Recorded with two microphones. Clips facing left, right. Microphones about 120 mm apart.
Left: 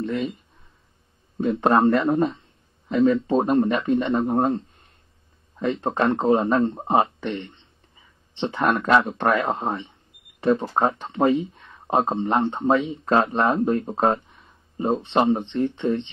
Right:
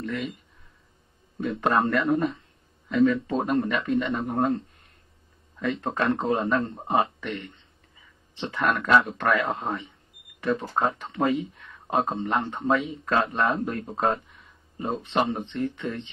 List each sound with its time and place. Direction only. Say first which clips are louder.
0.0 s speech: left 5 dB; 30° left (ahead or behind)
1.4 s speech: left 5 dB; 30° left (ahead or behind)